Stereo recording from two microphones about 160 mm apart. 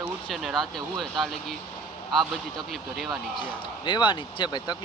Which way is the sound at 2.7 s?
Centre (ahead or behind).